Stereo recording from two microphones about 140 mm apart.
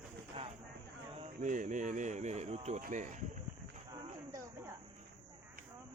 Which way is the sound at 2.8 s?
65° right (ahead or behind).